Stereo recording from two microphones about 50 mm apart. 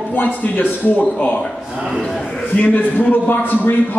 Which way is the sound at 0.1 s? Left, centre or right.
Left.